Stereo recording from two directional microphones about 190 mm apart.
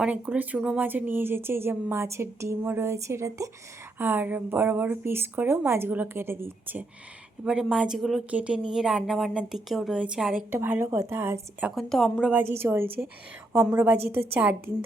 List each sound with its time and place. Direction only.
0.0 s a woman's voice: 5° right (ahead or behind)
11.7 s a woman's voice: centre (ahead or behind)
12.3 s a woman's voice: 10° right (ahead or behind)